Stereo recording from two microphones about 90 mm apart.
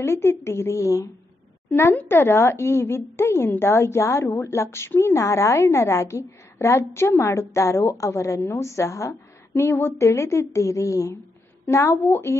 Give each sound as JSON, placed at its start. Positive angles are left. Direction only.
{"t": 0.0, "sound": "a woman's voice", "side_deg": 30}